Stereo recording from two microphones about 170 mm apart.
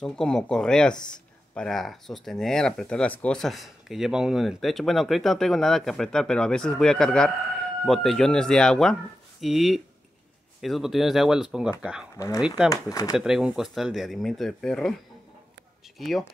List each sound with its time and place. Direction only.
0.0 s speech: 5° left (ahead or behind)
12.6 s speech: 20° left (ahead or behind)
13.1 s speech: 5° right (ahead or behind)
16.0 s speech: centre (ahead or behind)